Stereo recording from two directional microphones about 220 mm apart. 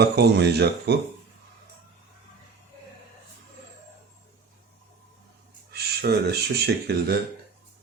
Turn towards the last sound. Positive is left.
turn(degrees=-50)  # may be behind; listen again after turning